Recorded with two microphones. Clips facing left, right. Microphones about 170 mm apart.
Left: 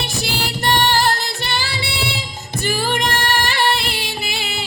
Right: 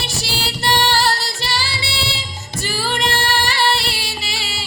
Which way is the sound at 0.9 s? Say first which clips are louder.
Left 1 dB; 55° left (ahead or behind).